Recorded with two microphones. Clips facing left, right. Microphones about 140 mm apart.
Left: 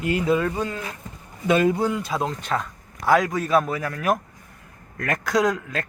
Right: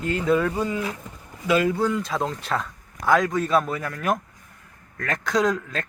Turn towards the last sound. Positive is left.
turn(degrees=5)  # may be behind; listen again after turning